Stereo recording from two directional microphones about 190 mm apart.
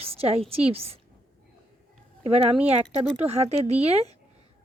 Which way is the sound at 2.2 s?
30° right (ahead or behind).